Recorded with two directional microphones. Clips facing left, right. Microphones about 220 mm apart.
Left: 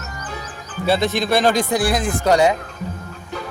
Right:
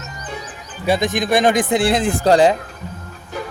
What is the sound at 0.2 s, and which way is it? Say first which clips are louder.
Speech: right 2 dB; 15° right (ahead or behind).